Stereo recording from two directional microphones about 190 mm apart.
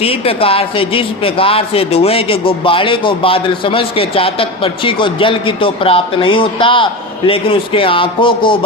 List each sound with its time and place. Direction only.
0.0 s a man's voice: 30° left (ahead or behind)